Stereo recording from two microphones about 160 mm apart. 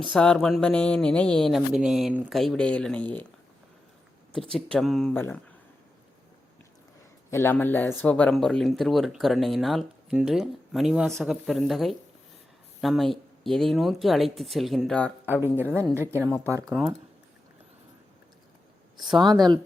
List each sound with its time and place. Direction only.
0.1 s speech: 5° left (ahead or behind)
4.3 s speech: 5° left (ahead or behind)
5.1 s speech: 15° left (ahead or behind)
7.3 s speech: 15° left (ahead or behind)
15.5 s speech: 15° right (ahead or behind)
18.9 s speech: centre (ahead or behind)